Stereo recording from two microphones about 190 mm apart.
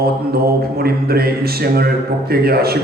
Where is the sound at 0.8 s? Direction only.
55° right (ahead or behind).